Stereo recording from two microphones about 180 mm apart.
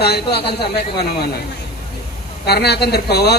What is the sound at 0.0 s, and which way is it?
Speech, 65° left (ahead or behind).